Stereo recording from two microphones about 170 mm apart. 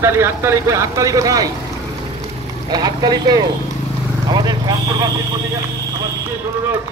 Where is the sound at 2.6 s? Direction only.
25° right (ahead or behind).